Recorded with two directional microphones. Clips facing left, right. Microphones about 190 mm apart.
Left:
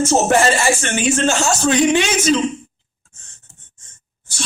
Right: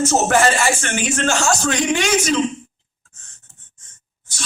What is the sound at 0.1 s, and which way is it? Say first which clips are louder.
Speech: left 2 dB; 25° left (ahead or behind).